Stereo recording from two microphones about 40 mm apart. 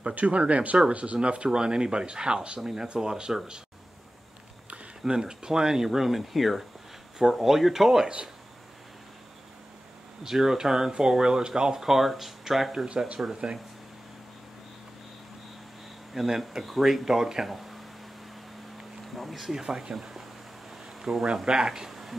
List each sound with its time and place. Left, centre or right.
0.1 s speech: right
2.6 s speech: centre
5.0 s speech: centre
10.2 s speech: centre
12.7 s speech: right
16.1 s speech: centre
17.5 s a sound: centre
19.1 s speech: centre